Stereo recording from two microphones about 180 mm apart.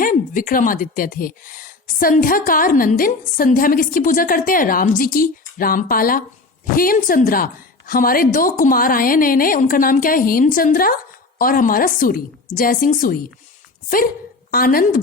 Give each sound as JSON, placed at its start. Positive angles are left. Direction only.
{"t": 0.0, "sound": "a woman's voice", "side_deg": 50}
{"t": 14.5, "sound": "a woman's voice", "side_deg": 55}